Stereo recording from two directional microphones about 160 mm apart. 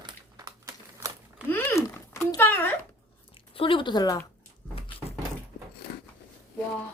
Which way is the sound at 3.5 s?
35° left (ahead or behind).